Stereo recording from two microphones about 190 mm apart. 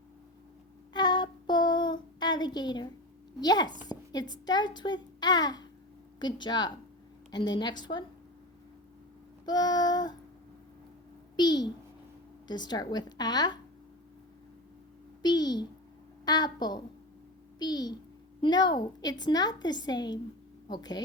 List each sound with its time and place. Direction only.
0.9 s child singing: 25° left (ahead or behind)
3.4 s a woman's voice: 20° left (ahead or behind)
9.5 s child singing: 20° left (ahead or behind)
11.3 s a woman's voice: 20° left (ahead or behind)
15.2 s a child's voice: 20° left (ahead or behind)